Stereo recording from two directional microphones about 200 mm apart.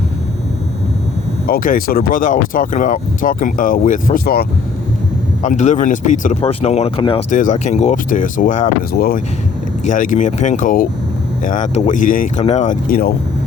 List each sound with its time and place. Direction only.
1.5 s speech: 45° left (ahead or behind); by 7.3 s 25° left (ahead or behind)
7.3 s speech: 40° left (ahead or behind)